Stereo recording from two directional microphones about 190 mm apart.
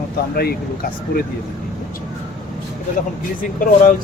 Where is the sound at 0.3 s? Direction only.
50° left (ahead or behind).